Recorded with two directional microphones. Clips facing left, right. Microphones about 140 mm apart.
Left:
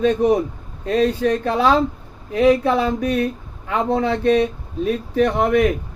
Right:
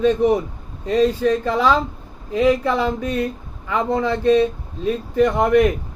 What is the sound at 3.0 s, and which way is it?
Speech, 75° left (ahead or behind).